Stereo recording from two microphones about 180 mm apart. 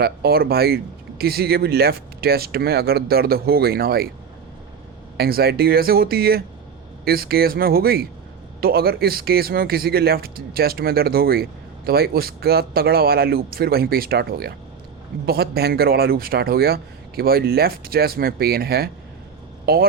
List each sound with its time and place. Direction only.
0.0 s a man's voice: 60° right (ahead or behind)
5.1 s a man's voice: 60° right (ahead or behind)